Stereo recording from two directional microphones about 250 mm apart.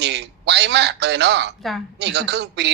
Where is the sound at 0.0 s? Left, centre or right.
Right.